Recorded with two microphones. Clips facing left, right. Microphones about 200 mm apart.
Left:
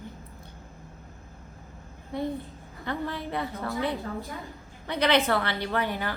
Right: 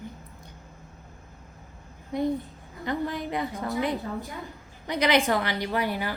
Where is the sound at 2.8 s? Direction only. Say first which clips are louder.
Right 3 dB; 15° right (ahead or behind).